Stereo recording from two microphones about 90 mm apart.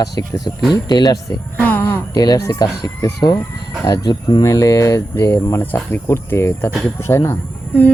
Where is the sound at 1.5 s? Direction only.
20° left (ahead or behind).